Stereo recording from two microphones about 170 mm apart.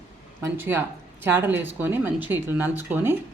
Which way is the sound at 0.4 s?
15° right (ahead or behind).